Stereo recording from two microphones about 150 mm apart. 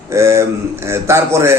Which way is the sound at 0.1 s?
20° right (ahead or behind).